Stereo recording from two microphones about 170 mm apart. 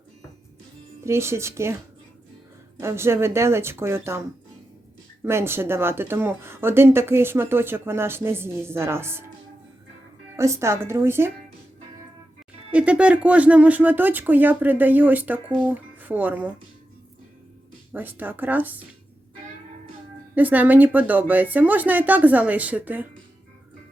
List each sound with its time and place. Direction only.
1.0 s speech: 15° right (ahead or behind)
2.8 s speech: 15° right (ahead or behind)
5.2 s speech: 15° right (ahead or behind)
10.3 s speech: 15° right (ahead or behind)
12.7 s speech: 5° right (ahead or behind)
17.9 s speech: 10° right (ahead or behind)
20.3 s speech: 10° right (ahead or behind)